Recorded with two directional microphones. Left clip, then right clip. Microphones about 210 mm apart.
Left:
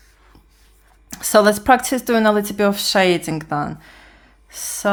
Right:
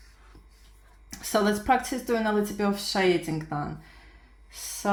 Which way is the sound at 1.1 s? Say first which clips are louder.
Left 12 dB; 30° left (ahead or behind).